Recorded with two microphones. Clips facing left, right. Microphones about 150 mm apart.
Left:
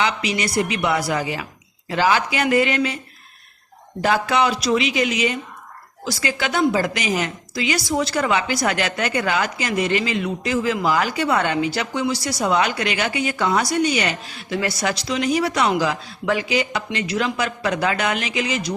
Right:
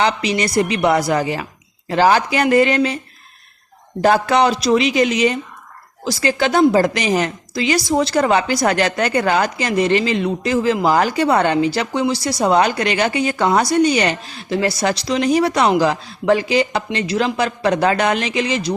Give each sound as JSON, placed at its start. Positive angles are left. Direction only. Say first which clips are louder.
{"t": 0.0, "sound": "a woman's voice", "louder": "right 4 dB", "side_deg": -40}
{"t": 4.0, "sound": "a woman's voice", "louder": "right 5 dB", "side_deg": -40}